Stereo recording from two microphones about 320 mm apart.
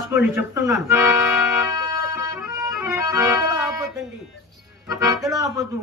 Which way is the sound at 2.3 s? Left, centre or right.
Centre.